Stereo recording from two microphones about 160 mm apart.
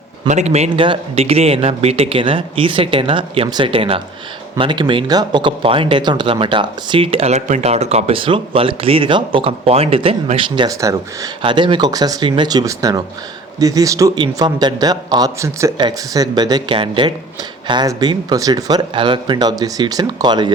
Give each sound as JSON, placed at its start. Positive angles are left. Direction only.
{"t": 0.3, "sound": "speech", "side_deg": -45}
{"t": 11.4, "sound": "speech", "side_deg": -30}